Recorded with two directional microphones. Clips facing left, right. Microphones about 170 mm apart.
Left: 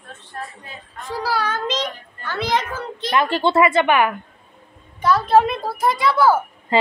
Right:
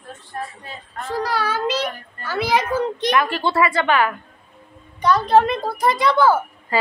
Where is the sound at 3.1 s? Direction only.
25° left (ahead or behind).